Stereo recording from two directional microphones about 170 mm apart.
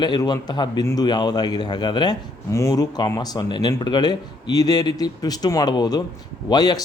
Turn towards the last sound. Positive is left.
turn(degrees=25)  # may be behind; listen again after turning